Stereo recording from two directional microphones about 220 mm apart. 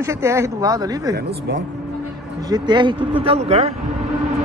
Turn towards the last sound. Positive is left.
turn(degrees=-30)  # may be behind; listen again after turning